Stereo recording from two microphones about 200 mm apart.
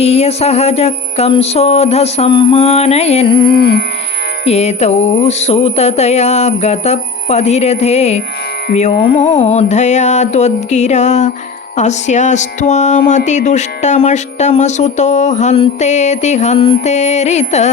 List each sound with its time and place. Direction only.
0.0 s music: 30° left (ahead or behind)
3.5 s music: 50° left (ahead or behind)
4.4 s music: 35° left (ahead or behind)